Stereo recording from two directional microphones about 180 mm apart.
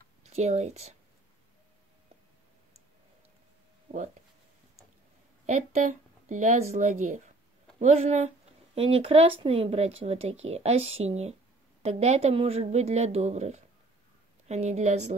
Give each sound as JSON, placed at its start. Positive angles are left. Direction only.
{"t": 0.3, "sound": "speech", "side_deg": -40}
{"t": 3.9, "sound": "speech", "side_deg": -30}
{"t": 5.5, "sound": "speech", "side_deg": -45}